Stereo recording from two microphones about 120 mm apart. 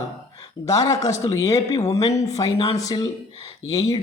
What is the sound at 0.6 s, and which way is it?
A man's voice, 30° left (ahead or behind).